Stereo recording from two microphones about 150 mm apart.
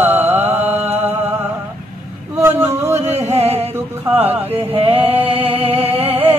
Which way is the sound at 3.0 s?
45° right (ahead or behind).